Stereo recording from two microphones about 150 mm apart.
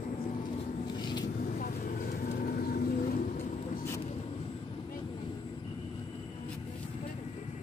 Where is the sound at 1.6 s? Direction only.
70° left (ahead or behind).